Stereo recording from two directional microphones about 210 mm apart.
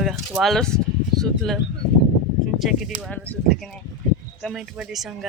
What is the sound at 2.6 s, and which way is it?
Speech, centre (ahead or behind).